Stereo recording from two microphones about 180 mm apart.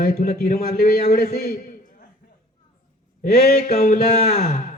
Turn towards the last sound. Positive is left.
turn(degrees=45)  # may be behind; listen again after turning